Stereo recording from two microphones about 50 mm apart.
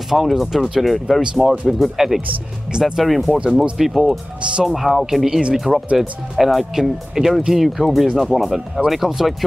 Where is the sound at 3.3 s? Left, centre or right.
Centre.